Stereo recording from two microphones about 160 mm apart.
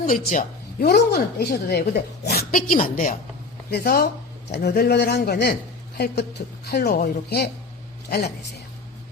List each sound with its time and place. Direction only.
0.1 s a woman's voice: 60° left (ahead or behind)
3.7 s speech: 75° left (ahead or behind)
6.7 s speech: 90° left